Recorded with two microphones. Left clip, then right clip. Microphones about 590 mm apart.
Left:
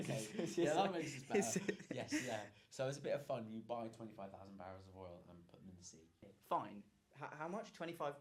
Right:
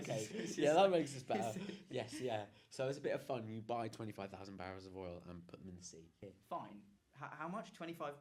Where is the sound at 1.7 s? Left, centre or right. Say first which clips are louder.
Left 1 dB; centre.